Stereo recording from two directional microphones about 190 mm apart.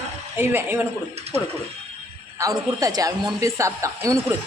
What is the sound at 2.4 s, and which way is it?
A man's voice, 20° right (ahead or behind).